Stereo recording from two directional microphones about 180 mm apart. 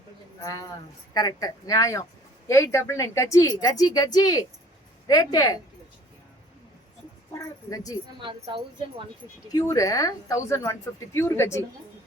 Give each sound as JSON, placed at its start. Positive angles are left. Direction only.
{"t": 0.4, "sound": "a woman's voice", "side_deg": 20}
{"t": 7.3, "sound": "speech", "side_deg": 20}
{"t": 8.2, "sound": "a woman's voice", "side_deg": -25}
{"t": 9.5, "sound": "speech", "side_deg": 20}